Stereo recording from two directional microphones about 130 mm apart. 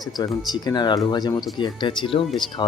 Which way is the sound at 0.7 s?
35° left (ahead or behind).